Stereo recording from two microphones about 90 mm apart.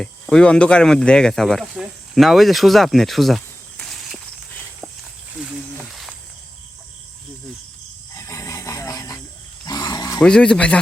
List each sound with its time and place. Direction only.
0.0 s speech: 5° left (ahead or behind)
5.9 s cricket: centre (ahead or behind)
8.1 s a sound: 30° left (ahead or behind)
10.2 s speech: 10° left (ahead or behind)